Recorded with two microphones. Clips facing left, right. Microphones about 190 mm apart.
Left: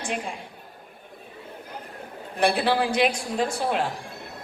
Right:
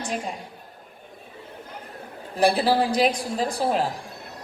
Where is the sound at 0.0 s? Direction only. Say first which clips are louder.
Right 1 dB; 40° right (ahead or behind).